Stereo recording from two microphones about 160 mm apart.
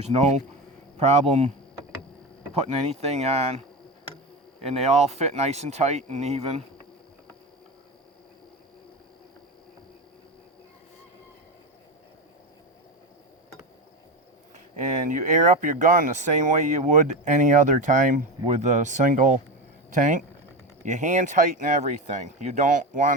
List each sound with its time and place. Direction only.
0.0 s speech: 45° right (ahead or behind)
2.8 s speech: 40° right (ahead or behind)
4.6 s speech: 40° right (ahead or behind)
15.0 s speech: 50° right (ahead or behind)